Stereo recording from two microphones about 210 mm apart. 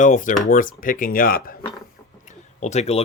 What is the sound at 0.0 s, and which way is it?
Speech, 40° left (ahead or behind).